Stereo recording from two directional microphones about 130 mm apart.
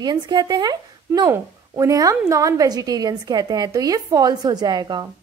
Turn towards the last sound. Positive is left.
turn(degrees=-35)  # may be behind; listen again after turning